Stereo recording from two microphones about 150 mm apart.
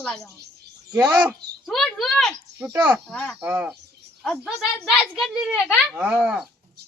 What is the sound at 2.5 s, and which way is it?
Speech, 15° right (ahead or behind).